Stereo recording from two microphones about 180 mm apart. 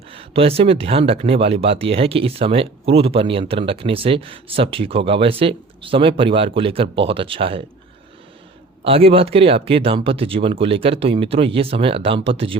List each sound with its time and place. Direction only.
0.1 s speech: 30° right (ahead or behind)
8.8 s speech: 30° right (ahead or behind)